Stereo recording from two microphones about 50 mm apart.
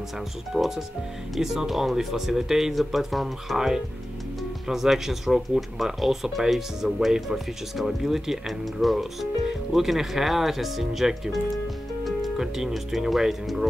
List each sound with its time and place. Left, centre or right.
0.5 s speech: centre